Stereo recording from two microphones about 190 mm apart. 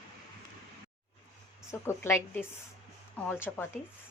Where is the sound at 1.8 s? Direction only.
10° left (ahead or behind).